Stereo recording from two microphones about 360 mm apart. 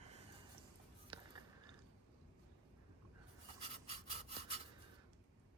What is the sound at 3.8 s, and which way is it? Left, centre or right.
Sawing, centre.